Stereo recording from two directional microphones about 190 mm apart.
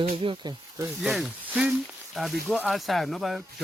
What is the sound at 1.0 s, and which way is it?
Speech, centre (ahead or behind).